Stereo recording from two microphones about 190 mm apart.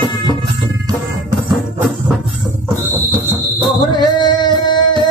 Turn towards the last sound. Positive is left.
turn(degrees=25)  # may be behind; listen again after turning